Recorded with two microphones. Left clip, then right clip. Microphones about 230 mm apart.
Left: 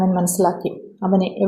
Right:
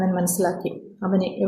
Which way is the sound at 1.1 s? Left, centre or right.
Centre.